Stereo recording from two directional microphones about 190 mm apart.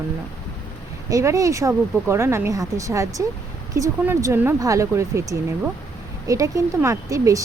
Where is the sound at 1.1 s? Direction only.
15° right (ahead or behind).